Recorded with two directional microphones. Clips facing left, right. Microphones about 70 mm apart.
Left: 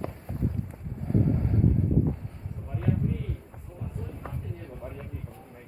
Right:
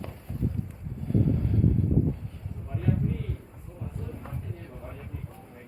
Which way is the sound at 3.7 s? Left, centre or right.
Centre.